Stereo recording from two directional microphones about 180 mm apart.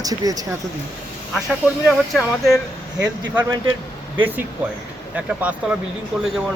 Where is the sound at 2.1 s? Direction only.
Centre (ahead or behind).